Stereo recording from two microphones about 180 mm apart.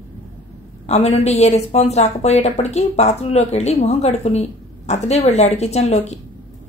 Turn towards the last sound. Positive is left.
turn(degrees=35)  # may be behind; listen again after turning